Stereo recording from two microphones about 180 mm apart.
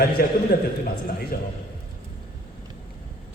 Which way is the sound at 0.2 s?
55° left (ahead or behind).